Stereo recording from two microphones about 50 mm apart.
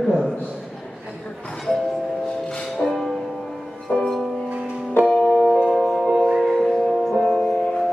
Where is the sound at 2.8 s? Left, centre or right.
Centre.